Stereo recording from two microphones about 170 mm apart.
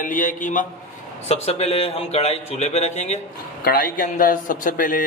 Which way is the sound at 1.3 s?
40° left (ahead or behind).